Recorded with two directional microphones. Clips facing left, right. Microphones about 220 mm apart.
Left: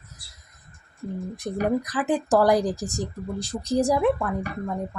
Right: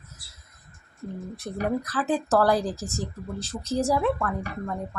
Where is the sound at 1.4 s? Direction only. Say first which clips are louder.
Left 3 dB; 15° left (ahead or behind).